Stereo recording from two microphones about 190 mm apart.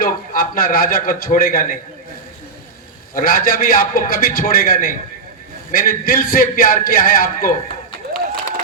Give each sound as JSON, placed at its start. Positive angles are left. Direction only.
{"t": 0.0, "sound": "a man's voice", "side_deg": 50}
{"t": 3.2, "sound": "a man's voice", "side_deg": 50}